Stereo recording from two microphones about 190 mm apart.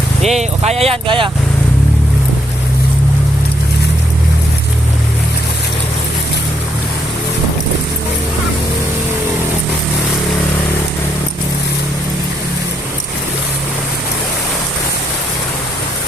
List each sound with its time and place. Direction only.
0.2 s speech: 35° right (ahead or behind)